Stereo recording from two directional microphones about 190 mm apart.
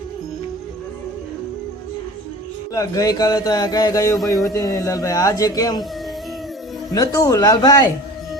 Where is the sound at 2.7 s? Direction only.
20° left (ahead or behind).